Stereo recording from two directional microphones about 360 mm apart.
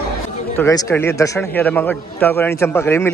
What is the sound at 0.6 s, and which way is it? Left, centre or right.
A man's voice, centre.